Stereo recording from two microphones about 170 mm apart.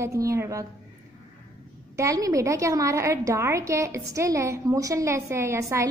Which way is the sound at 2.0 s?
20° right (ahead or behind).